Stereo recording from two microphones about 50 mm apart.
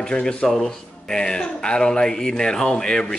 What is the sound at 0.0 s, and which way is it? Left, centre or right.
Speech, centre.